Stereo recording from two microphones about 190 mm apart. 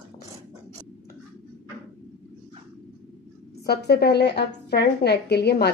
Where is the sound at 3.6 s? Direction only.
55° left (ahead or behind).